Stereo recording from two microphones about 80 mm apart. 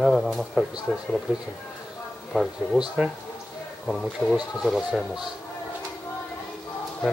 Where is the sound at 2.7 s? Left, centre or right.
Centre.